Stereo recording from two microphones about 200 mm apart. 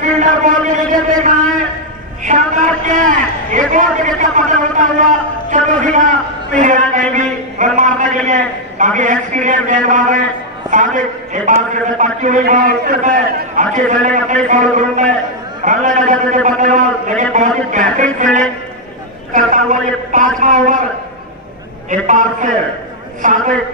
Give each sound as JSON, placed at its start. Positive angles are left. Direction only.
{"t": 0.2, "sound": "a sound", "side_deg": -40}
{"t": 5.5, "sound": "a man's voice", "side_deg": -40}
{"t": 21.9, "sound": "a man's voice", "side_deg": -40}